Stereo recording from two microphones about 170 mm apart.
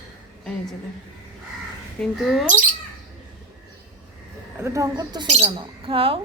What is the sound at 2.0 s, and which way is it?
Speech, centre (ahead or behind).